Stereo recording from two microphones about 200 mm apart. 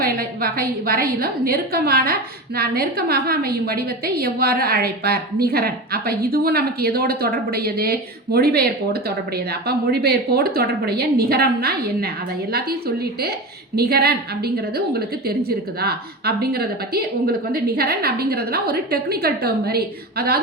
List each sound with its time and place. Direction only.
0.0 s a woman's voice: 50° right (ahead or behind)